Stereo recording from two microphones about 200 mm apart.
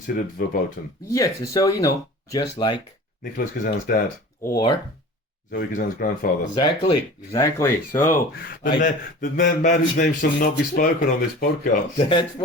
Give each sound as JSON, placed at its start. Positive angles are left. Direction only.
{"t": 0.4, "sound": "speech", "side_deg": 45}
{"t": 1.1, "sound": "speech", "side_deg": 15}
{"t": 3.3, "sound": "speech", "side_deg": 45}
{"t": 4.4, "sound": "speech", "side_deg": 20}
{"t": 5.5, "sound": "speech", "side_deg": 50}
{"t": 6.5, "sound": "speech", "side_deg": 25}
{"t": 7.3, "sound": "speech", "side_deg": 10}
{"t": 8.8, "sound": "a man's voice", "side_deg": 40}
{"t": 11.9, "sound": "speech", "side_deg": 25}